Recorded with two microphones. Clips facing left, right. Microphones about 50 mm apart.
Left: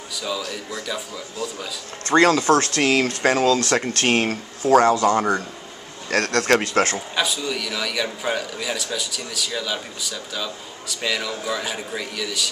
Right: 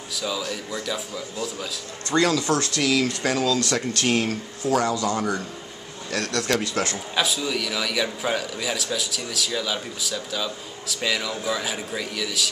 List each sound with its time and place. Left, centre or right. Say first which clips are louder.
0.1 s speech: even; centre
2.0 s speech: left 5 dB; left
7.2 s speech: right 1 dB; centre